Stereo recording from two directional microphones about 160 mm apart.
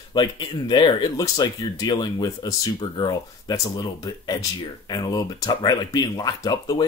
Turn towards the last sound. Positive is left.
turn(degrees=25)  # may be behind; listen again after turning